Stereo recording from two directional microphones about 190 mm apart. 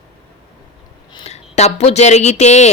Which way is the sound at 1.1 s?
30° left (ahead or behind).